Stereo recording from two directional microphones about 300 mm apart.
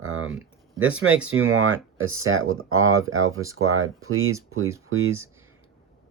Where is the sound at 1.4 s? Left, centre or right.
Right.